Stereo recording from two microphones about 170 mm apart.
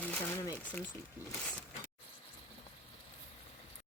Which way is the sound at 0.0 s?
10° left (ahead or behind).